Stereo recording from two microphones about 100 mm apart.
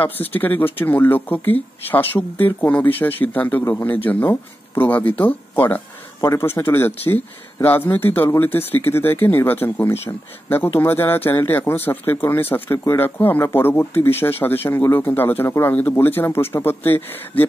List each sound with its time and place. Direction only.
0.0 s speech: 20° left (ahead or behind)